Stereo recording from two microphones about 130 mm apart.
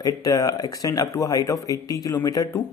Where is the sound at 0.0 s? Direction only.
30° left (ahead or behind).